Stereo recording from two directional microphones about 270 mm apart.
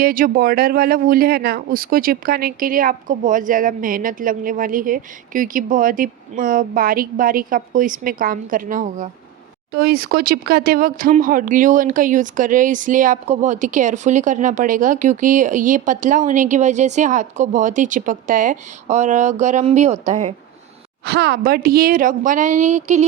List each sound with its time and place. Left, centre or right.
0.0 s speech: right
21.0 s speech: right